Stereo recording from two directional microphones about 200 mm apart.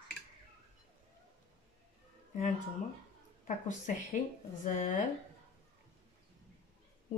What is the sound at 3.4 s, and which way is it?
Speech, 40° left (ahead or behind).